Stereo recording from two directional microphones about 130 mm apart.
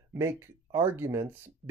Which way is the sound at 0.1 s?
20° right (ahead or behind).